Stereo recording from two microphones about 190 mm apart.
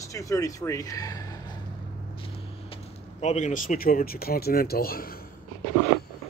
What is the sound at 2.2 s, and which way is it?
Speech, 35° left (ahead or behind).